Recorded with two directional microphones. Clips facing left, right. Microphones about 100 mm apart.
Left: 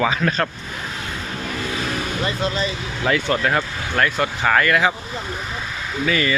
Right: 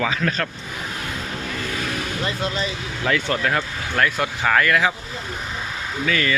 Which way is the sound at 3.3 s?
10° left (ahead or behind).